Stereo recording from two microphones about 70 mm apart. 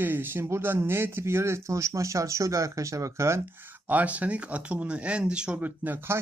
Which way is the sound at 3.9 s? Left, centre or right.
Right.